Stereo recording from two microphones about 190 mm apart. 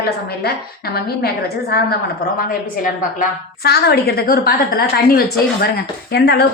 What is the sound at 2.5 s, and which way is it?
A woman's voice, 45° left (ahead or behind).